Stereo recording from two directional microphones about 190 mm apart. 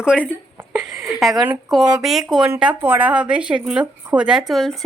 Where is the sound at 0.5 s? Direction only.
15° right (ahead or behind).